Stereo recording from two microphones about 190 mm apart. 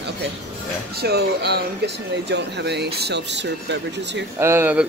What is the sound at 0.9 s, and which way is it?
Speech, 60° right (ahead or behind).